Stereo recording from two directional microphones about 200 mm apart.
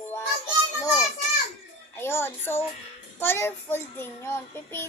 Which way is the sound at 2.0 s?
10° left (ahead or behind).